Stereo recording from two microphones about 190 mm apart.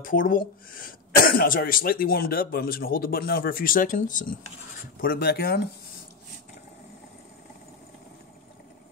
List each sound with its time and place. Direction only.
0.0 s speech: 45° left (ahead or behind)
5.0 s speech: 55° left (ahead or behind)